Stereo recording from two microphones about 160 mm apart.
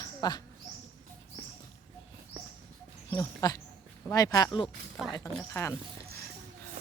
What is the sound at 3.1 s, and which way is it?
Speech, 25° left (ahead or behind).